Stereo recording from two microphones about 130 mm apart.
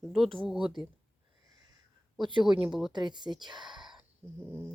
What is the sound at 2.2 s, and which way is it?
Speech, 40° right (ahead or behind).